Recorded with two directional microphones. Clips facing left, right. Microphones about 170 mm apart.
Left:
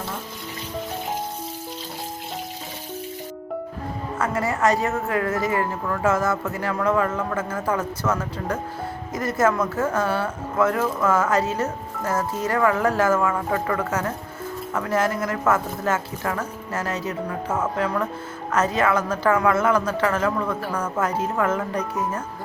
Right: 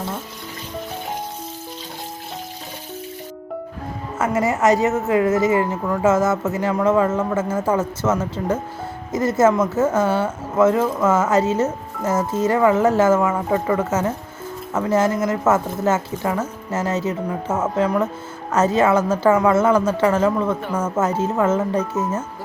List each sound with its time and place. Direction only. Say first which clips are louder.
4.2 s speech: right 4 dB; 20° right (ahead or behind)